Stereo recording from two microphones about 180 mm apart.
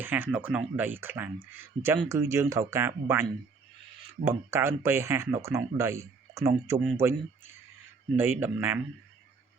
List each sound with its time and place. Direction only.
0.0 s speech: 10° right (ahead or behind)
4.3 s speech: 15° right (ahead or behind)